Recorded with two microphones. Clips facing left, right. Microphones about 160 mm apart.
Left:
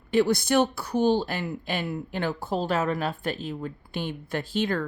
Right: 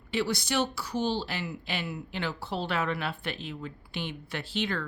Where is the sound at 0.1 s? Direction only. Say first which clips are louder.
Left 8 dB; 50° left (ahead or behind).